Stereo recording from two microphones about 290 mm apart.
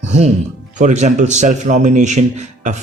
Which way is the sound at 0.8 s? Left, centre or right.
Right.